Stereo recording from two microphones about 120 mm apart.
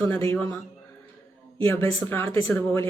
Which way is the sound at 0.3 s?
20° left (ahead or behind).